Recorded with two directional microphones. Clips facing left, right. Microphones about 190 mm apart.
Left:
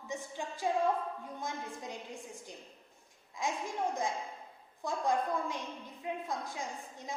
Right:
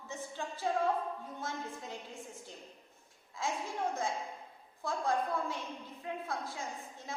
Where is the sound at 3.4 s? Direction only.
15° left (ahead or behind).